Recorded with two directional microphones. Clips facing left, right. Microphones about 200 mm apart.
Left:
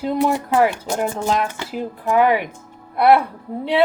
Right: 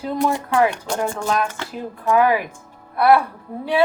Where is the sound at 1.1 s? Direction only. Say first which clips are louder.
Left 1 dB; 20° left (ahead or behind).